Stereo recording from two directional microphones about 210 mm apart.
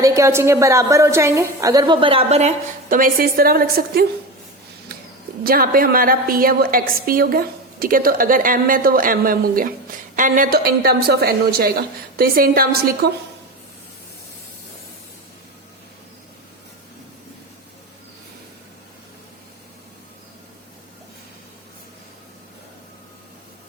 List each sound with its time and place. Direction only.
0.0 s a woman's voice: 15° right (ahead or behind); by 2.5 s 30° right (ahead or behind)
2.9 s a woman's voice: 40° right (ahead or behind)
5.4 s a woman's voice: 45° right (ahead or behind)